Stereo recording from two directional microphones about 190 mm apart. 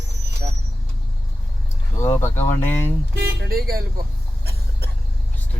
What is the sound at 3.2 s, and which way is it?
Speech, 55° right (ahead or behind).